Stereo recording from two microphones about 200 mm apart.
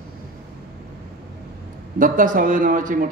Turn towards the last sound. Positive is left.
turn(degrees=-40)  # may be behind; listen again after turning